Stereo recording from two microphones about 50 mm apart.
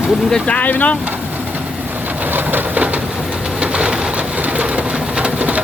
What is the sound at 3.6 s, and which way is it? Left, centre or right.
Pigeon, right.